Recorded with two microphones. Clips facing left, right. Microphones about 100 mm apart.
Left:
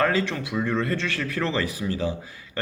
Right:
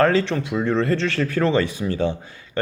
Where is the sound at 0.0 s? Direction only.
30° right (ahead or behind).